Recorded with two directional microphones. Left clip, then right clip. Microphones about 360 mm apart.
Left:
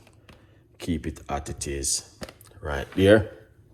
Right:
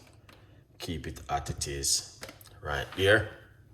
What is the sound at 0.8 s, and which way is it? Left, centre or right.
Speech, centre.